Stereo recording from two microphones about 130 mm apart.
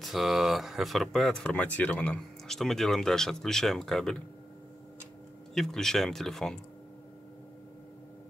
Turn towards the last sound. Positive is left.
turn(degrees=5)  # may be behind; listen again after turning